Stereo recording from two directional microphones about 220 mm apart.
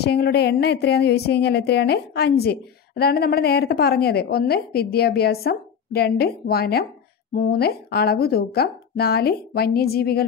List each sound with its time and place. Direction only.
0.0 s a woman's voice: 45° left (ahead or behind)